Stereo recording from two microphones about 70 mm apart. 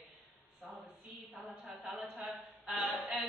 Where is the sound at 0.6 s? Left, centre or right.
Centre.